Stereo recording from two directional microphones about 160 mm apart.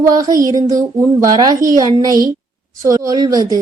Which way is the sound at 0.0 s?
20° right (ahead or behind).